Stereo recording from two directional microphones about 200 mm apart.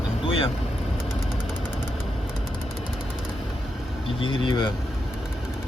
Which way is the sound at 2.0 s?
5° right (ahead or behind).